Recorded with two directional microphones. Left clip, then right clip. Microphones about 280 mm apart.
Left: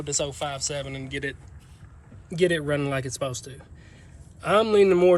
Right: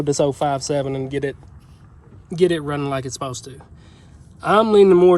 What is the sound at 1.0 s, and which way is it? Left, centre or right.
Speech, right.